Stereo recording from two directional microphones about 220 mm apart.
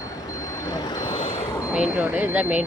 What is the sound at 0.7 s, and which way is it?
Vehicle, 20° left (ahead or behind).